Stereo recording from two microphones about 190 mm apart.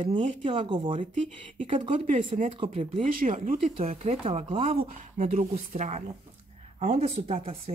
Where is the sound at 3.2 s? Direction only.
45° right (ahead or behind).